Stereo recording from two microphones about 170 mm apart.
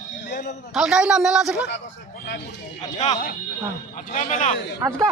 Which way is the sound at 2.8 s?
40° left (ahead or behind).